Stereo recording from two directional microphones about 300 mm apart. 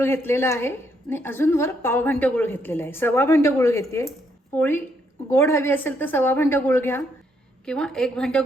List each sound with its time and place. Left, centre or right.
0.0 s a woman's voice: centre